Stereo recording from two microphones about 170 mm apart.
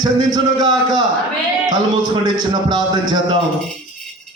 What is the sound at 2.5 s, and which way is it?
Speech, 25° right (ahead or behind).